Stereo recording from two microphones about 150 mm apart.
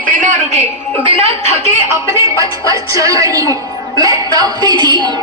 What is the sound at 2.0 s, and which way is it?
A woman's voice, 20° right (ahead or behind).